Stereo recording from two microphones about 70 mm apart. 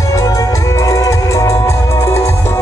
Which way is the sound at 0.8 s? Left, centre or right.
Left.